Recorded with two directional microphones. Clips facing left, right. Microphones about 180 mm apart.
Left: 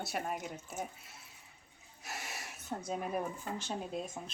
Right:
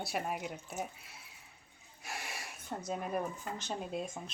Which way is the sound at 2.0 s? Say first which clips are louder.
Right 1 dB; centre (ahead or behind).